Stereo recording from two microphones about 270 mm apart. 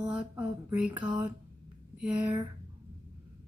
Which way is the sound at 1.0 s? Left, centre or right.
Centre.